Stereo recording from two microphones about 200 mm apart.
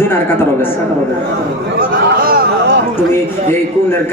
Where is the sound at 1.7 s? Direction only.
45° right (ahead or behind).